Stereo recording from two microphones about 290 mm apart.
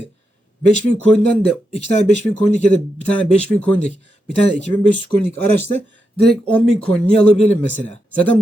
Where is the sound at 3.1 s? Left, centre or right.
Centre.